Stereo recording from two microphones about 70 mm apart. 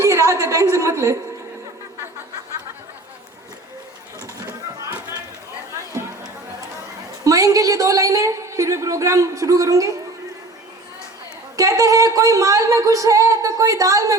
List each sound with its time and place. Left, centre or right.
0.0 s a woman's voice: right
7.3 s a woman's voice: right
11.5 s a woman's voice: right